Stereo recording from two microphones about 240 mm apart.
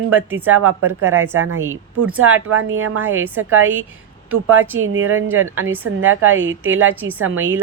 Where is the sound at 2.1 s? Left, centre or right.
Right.